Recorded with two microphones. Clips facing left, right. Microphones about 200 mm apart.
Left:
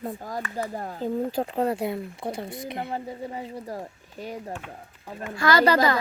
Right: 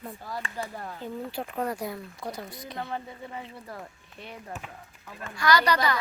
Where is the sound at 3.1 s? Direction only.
35° left (ahead or behind).